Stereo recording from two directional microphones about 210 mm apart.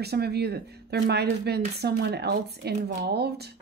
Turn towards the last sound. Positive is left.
turn(degrees=-50)  # may be behind; listen again after turning